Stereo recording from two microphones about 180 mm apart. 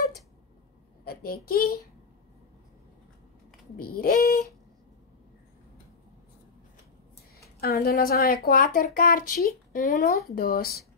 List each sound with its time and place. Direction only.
1.0 s a child's voice: 55° left (ahead or behind)
3.7 s speech: 55° left (ahead or behind)
7.6 s speech: 60° left (ahead or behind)